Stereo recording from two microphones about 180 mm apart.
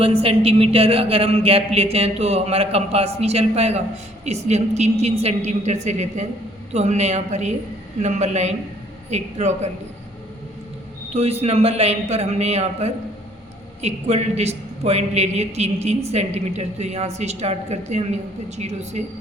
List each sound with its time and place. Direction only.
0.0 s a woman's voice: 30° right (ahead or behind)
11.1 s a woman's voice: 35° right (ahead or behind)